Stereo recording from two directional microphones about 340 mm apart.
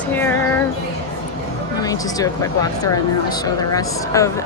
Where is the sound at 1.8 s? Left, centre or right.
Centre.